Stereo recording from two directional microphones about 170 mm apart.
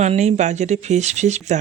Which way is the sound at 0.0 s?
40° right (ahead or behind).